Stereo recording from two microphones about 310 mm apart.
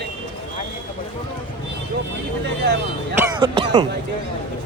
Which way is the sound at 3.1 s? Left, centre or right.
Centre.